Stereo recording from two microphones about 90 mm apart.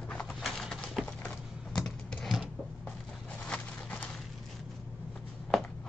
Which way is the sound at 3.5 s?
15° left (ahead or behind).